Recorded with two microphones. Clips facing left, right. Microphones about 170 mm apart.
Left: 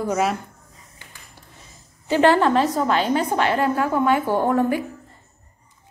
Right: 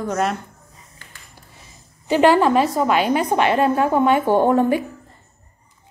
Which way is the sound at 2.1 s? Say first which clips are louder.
Right 2 dB; 15° right (ahead or behind).